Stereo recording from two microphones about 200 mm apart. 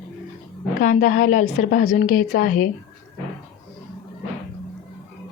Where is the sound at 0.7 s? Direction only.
40° left (ahead or behind).